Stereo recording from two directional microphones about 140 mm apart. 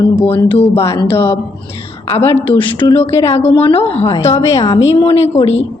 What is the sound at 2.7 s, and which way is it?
A woman's voice, 40° left (ahead or behind).